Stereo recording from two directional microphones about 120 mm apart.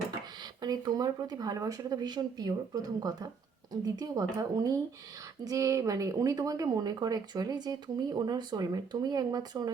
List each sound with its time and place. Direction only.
0.6 s a woman's voice: 30° right (ahead or behind)